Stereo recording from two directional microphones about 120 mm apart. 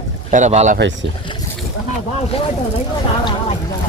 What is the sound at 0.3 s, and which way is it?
Speech, 85° right.